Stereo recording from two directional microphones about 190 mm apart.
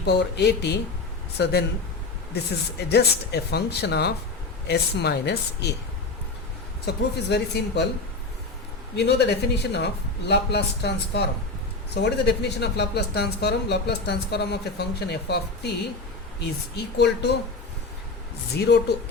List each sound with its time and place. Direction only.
0.0 s speech: 60° left (ahead or behind)
6.8 s speech: 60° left (ahead or behind)
9.0 s speech: 60° left (ahead or behind)
18.5 s speech: 60° left (ahead or behind)